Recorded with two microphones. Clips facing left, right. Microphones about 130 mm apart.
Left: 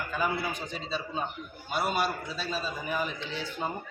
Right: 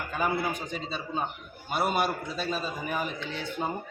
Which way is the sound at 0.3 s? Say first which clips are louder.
Right 3 dB; 55° right (ahead or behind).